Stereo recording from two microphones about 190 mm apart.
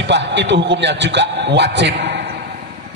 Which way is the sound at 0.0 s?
70° right (ahead or behind).